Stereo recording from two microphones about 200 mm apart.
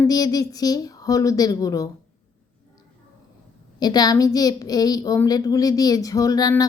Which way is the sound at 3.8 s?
20° left (ahead or behind).